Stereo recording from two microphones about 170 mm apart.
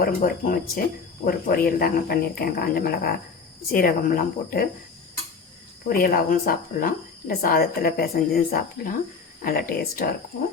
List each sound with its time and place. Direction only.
0.0 s a woman's voice: 55° left (ahead or behind)
5.9 s a woman's voice: 60° left (ahead or behind)